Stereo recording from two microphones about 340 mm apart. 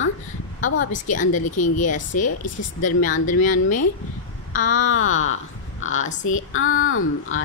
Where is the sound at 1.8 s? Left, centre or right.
Left.